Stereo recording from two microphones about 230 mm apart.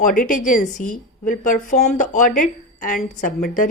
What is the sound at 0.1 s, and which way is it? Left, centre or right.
A woman's voice, left.